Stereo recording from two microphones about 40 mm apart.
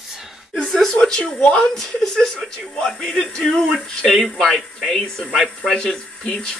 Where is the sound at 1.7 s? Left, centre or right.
Centre.